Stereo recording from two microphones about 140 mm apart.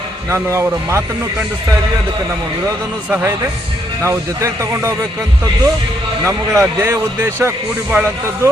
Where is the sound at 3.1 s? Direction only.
15° right (ahead or behind).